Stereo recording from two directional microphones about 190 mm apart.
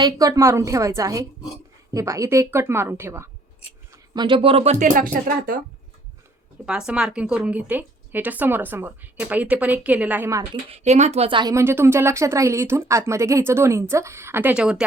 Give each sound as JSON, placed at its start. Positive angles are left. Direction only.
{"t": 0.0, "sound": "a woman's voice", "side_deg": -20}
{"t": 6.7, "sound": "a woman's voice", "side_deg": -5}
{"t": 10.7, "sound": "a woman's voice", "side_deg": -35}